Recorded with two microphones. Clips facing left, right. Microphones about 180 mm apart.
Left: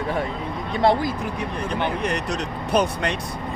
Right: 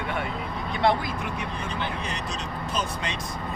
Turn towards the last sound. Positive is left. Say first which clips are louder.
# left 9 dB
turn(degrees=60)  # may be behind; listen again after turning